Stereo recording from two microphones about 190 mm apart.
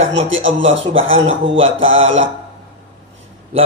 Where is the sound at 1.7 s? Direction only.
90° right.